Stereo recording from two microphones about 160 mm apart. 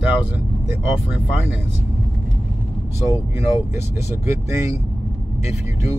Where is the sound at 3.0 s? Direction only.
15° right (ahead or behind).